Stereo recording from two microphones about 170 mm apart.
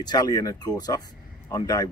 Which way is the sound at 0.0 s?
25° left (ahead or behind).